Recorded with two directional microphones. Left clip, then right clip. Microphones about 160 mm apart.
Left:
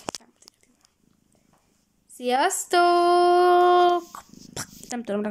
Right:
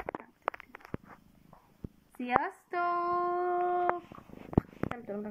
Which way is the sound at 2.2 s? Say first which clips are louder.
Left 8 dB; 40° left (ahead or behind).